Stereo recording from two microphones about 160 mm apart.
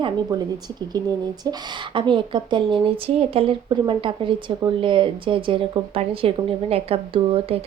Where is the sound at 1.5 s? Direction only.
30° right (ahead or behind).